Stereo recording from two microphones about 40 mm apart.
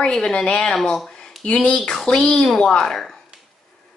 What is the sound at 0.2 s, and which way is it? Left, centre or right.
Speech, left.